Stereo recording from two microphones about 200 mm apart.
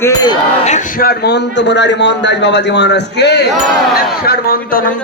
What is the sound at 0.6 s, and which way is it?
A man's voice, 40° left (ahead or behind).